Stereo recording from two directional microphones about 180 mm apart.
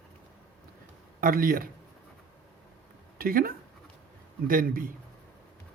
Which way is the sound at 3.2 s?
55° right (ahead or behind).